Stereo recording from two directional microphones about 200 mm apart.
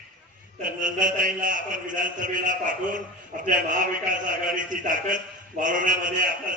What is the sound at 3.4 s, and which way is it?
Speech, 40° right (ahead or behind).